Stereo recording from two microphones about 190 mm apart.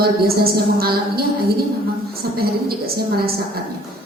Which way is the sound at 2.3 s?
55° right (ahead or behind).